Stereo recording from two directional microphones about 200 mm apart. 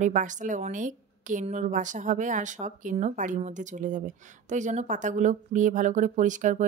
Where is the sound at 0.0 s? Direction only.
40° right (ahead or behind).